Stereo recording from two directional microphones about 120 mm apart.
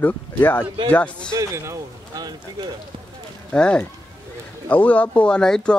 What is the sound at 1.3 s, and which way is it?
Speech, 25° right (ahead or behind).